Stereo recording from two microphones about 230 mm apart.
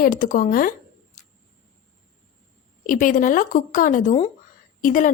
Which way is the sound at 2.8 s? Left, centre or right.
Left.